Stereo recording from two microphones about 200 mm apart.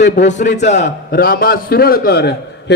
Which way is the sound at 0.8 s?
50° left (ahead or behind).